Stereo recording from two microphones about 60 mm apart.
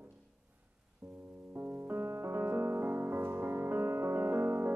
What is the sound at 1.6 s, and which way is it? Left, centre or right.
Music, right.